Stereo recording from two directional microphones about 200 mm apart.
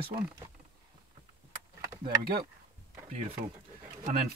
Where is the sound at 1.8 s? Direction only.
15° right (ahead or behind).